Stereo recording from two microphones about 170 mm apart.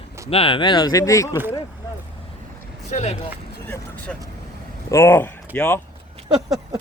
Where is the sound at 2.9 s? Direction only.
40° left (ahead or behind).